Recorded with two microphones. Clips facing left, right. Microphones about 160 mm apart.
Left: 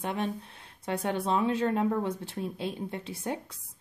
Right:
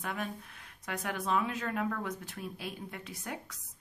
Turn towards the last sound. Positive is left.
turn(degrees=25)  # may be behind; listen again after turning